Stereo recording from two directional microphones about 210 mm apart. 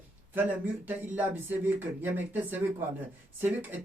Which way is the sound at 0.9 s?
10° right (ahead or behind).